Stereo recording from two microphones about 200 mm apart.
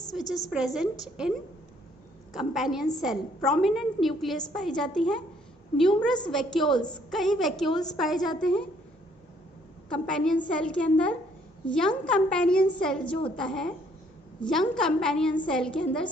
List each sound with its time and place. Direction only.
0.3 s a woman's voice: 15° left (ahead or behind)
0.5 s a woman's voice: centre (ahead or behind)
2.3 s a woman's voice: centre (ahead or behind)
6.3 s a woman's voice: centre (ahead or behind)
9.9 s a woman's voice: 5° left (ahead or behind)